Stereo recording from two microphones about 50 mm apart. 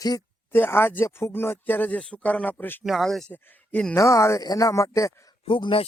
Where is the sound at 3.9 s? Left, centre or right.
Left.